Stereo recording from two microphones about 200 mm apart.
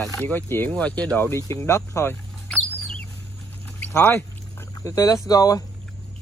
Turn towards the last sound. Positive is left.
turn(degrees=20)  # may be behind; listen again after turning